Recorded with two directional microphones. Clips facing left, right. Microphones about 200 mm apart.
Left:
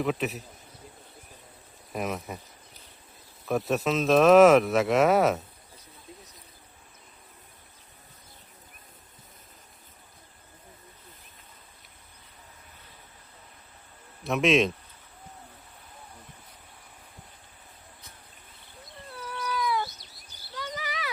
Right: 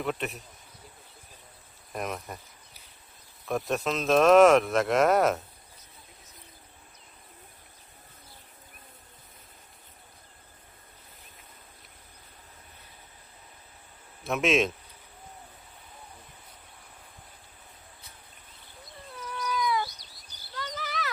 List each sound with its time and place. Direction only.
0.0 s speech: centre (ahead or behind)
1.9 s speech: 5° left (ahead or behind)
3.4 s speech: centre (ahead or behind)
14.3 s speech: centre (ahead or behind)
19.1 s cat: 5° left (ahead or behind)
20.0 s a sound: 25° left (ahead or behind)
20.6 s a sound: 10° left (ahead or behind)